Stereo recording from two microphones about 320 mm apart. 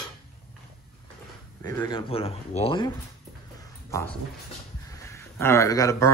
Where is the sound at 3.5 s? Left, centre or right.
Centre.